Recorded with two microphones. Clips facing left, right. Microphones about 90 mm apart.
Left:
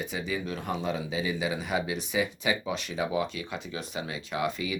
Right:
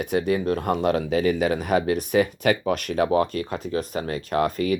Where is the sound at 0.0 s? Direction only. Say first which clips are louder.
Right 10 dB; 60° right (ahead or behind).